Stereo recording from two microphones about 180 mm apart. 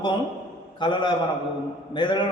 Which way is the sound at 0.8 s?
25° left (ahead or behind).